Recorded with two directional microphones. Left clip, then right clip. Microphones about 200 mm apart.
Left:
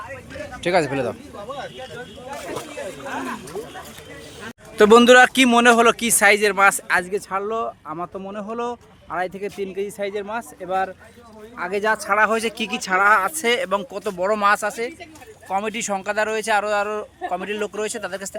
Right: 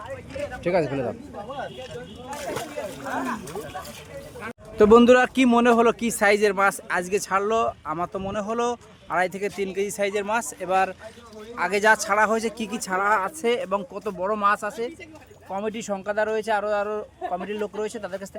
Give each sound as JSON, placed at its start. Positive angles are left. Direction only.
{"t": 0.6, "sound": "speech", "side_deg": 5}
{"t": 3.1, "sound": "speech", "side_deg": -45}
{"t": 4.8, "sound": "speech", "side_deg": -5}